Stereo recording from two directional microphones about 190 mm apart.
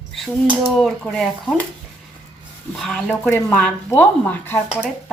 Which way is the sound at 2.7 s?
Centre (ahead or behind).